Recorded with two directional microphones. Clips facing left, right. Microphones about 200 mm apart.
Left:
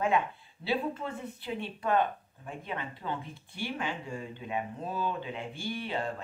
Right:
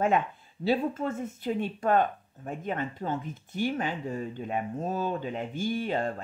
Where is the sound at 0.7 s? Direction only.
45° right (ahead or behind).